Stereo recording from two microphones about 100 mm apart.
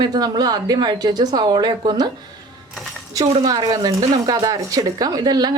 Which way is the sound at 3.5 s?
40° right (ahead or behind).